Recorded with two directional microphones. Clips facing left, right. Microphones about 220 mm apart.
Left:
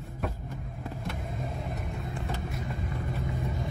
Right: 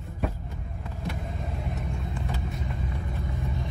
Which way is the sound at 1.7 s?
Centre (ahead or behind).